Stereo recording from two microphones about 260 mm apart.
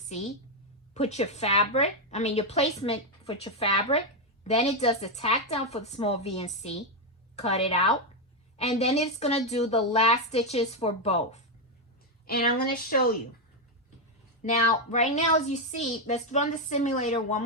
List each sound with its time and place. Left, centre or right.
0.1 s a woman's voice: left
12.2 s speech: left
14.5 s a woman's voice: left